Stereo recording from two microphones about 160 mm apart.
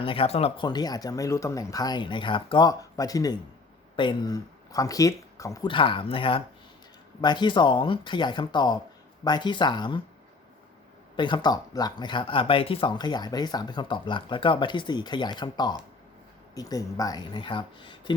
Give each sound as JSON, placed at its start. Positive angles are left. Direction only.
{"t": 0.0, "sound": "speech", "side_deg": 35}
{"t": 11.2, "sound": "speech", "side_deg": 30}